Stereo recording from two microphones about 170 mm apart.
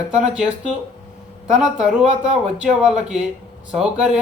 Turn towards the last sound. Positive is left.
turn(degrees=-5)  # may be behind; listen again after turning